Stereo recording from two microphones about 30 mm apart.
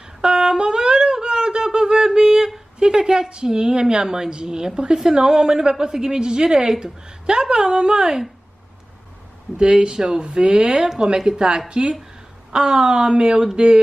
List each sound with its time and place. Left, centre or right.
0.2 s wind instrument: right
2.8 s a woman's voice: right
9.6 s a woman's voice: right